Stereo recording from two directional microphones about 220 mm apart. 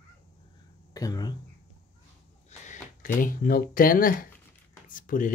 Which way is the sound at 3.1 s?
40° left (ahead or behind).